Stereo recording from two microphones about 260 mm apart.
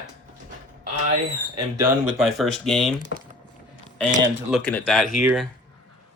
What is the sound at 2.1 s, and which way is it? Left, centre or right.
Speech, centre.